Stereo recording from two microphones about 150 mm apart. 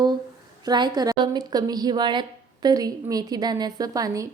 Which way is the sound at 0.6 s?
30° right (ahead or behind).